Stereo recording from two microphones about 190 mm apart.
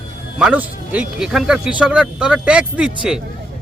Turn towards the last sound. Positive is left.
turn(degrees=-5)  # may be behind; listen again after turning